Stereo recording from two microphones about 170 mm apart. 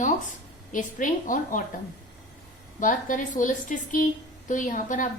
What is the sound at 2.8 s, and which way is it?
Speech, 50° left (ahead or behind).